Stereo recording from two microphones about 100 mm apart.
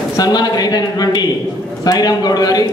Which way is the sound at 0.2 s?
40° left (ahead or behind).